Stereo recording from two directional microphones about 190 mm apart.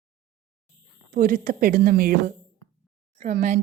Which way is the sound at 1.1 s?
50° right (ahead or behind).